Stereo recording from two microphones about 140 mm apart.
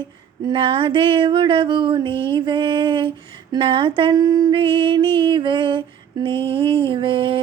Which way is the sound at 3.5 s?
40° right (ahead or behind).